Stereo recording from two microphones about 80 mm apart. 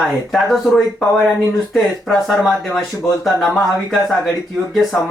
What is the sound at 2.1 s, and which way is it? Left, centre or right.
Speech, centre.